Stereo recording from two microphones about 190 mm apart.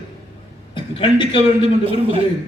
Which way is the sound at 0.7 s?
25° left (ahead or behind).